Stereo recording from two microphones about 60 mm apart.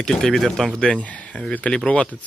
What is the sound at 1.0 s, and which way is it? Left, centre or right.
Speech, left.